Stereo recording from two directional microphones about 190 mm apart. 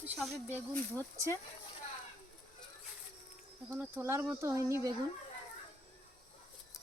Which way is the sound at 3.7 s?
10° right (ahead or behind).